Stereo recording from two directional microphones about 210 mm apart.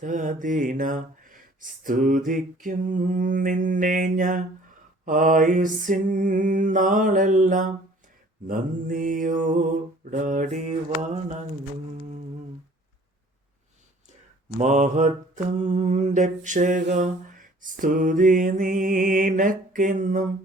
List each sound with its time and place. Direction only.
0.0 s mantra: 40° right (ahead or behind)
14.6 s mantra: 35° right (ahead or behind)